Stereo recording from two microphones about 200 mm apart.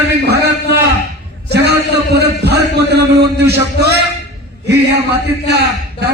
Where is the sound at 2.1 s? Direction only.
55° right (ahead or behind).